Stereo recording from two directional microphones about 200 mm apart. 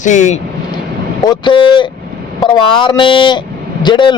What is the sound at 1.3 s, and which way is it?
Speech, 25° left (ahead or behind).